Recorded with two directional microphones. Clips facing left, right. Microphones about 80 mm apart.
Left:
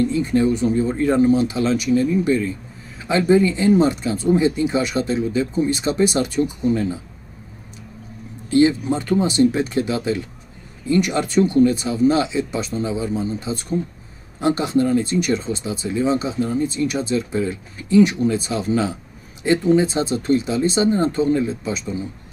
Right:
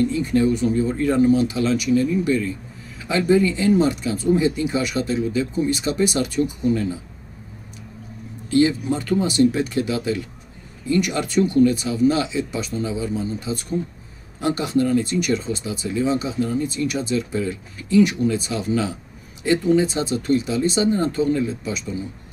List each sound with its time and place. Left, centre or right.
0.0 s speech: left
8.5 s speech: left